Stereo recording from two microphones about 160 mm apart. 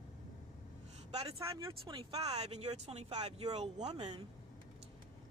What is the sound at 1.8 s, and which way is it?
Speech, 30° right (ahead or behind).